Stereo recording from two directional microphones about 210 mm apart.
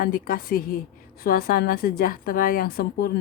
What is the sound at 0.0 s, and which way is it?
Speech, 45° left (ahead or behind).